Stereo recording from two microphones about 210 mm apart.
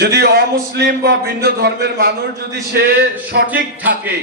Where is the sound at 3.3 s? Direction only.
60° right (ahead or behind).